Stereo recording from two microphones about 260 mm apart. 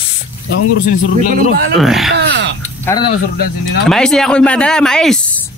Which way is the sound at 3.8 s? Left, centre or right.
Centre.